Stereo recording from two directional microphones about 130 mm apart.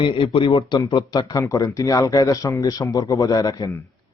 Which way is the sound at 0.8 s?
30° left (ahead or behind).